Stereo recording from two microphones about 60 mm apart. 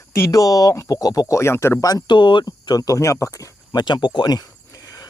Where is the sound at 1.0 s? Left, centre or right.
Left.